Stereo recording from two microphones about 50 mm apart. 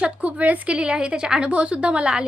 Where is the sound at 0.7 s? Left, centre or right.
Centre.